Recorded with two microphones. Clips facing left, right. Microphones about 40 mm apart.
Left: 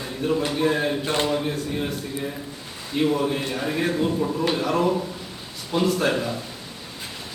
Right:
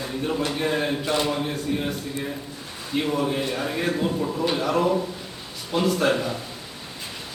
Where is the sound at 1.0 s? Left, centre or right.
Left.